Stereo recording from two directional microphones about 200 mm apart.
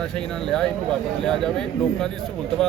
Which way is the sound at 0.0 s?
5° left (ahead or behind).